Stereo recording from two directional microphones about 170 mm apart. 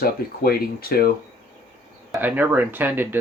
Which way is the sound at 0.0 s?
65° left (ahead or behind).